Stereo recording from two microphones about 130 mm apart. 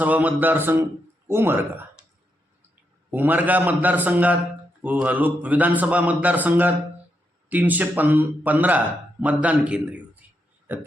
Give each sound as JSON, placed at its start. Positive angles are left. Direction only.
{"t": 0.0, "sound": "a man's voice", "side_deg": -10}
{"t": 3.1, "sound": "a man's voice", "side_deg": -15}